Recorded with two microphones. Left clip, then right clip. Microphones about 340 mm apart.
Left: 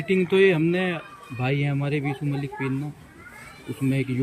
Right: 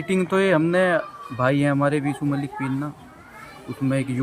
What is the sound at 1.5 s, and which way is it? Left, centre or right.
Speech, right.